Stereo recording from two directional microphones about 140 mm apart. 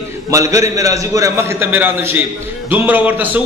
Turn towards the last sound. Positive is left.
turn(degrees=-15)  # may be behind; listen again after turning